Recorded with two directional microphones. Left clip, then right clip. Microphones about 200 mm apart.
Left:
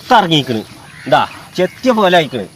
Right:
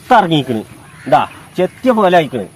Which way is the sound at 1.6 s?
Centre (ahead or behind).